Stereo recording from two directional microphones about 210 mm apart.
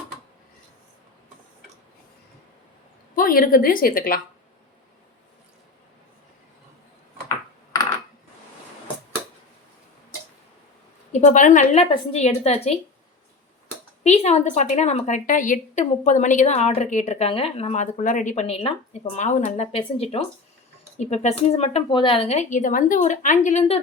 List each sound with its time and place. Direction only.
3.2 s a woman's voice: 40° left (ahead or behind)
11.1 s a woman's voice: 35° left (ahead or behind)
14.0 s a woman's voice: 30° left (ahead or behind)